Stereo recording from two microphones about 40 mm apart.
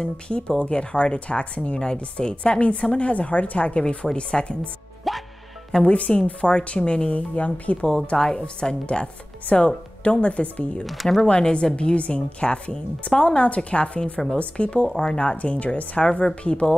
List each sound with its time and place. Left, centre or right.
0.0 s a woman's voice: left
5.1 s music: centre
5.8 s a woman's voice: left
8.4 s a woman's voice: left
10.9 s speech: centre
11.2 s a woman's voice: left